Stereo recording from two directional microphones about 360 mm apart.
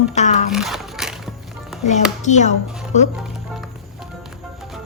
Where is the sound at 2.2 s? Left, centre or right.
Centre.